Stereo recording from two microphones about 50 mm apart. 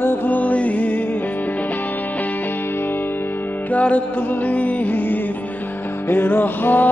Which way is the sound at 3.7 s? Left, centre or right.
Left.